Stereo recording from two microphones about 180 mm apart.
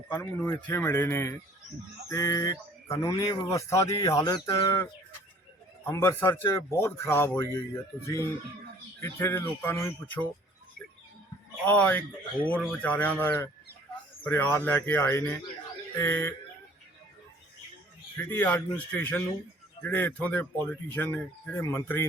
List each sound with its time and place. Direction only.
0.1 s speech: 10° left (ahead or behind)
11.6 s speech: 10° left (ahead or behind)
18.2 s speech: 10° left (ahead or behind)